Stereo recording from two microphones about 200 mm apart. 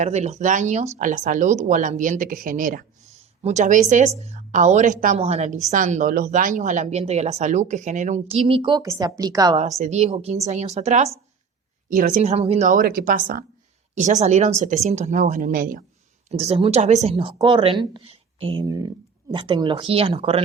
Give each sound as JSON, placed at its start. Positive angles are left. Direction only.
{"t": 0.0, "sound": "speech", "side_deg": -35}
{"t": 9.8, "sound": "speech", "side_deg": -35}
{"t": 16.3, "sound": "speech", "side_deg": -30}